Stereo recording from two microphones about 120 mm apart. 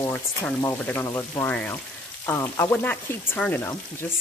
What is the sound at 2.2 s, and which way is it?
Speech, 20° left (ahead or behind).